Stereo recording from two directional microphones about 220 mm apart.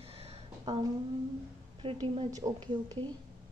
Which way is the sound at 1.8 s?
25° right (ahead or behind).